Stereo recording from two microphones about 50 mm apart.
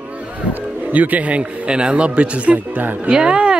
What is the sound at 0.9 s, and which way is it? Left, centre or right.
Speech, right.